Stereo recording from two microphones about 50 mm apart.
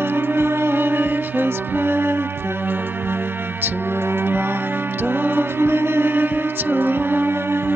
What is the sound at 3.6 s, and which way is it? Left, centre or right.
Music, right.